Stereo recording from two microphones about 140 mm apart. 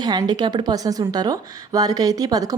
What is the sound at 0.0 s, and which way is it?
A woman's voice, 30° right (ahead or behind).